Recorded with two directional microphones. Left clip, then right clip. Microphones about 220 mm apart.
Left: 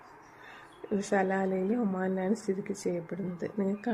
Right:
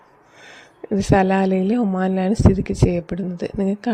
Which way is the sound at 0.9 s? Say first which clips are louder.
Right 12 dB; 40° right (ahead or behind).